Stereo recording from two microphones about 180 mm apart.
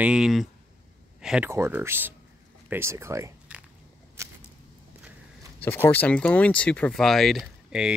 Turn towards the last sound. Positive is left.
turn(degrees=0)  # may be behind; listen again after turning